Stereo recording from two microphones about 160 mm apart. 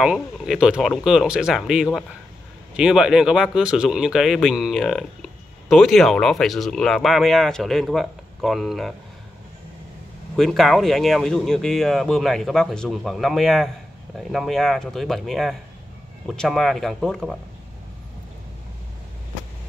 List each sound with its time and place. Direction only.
0.0 s speech: 5° right (ahead or behind)
10.3 s speech: centre (ahead or behind)